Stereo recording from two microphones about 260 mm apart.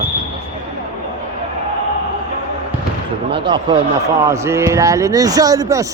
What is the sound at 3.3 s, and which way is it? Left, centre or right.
A man's voice, centre.